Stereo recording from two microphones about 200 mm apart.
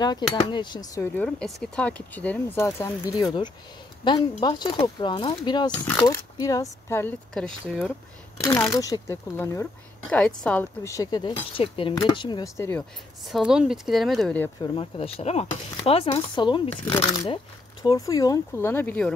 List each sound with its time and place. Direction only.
0.0 s speech: 20° left (ahead or behind); by 7.8 s centre (ahead or behind)
8.4 s speech: 15° left (ahead or behind)
13.3 s speech: 5° right (ahead or behind)
14.6 s speech: 30° left (ahead or behind); by 19.1 s 5° left (ahead or behind)